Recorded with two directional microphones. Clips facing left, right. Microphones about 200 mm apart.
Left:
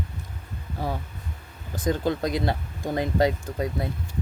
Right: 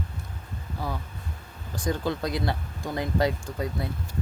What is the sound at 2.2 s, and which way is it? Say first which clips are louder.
Speech: left 3 dB; 20° left (ahead or behind).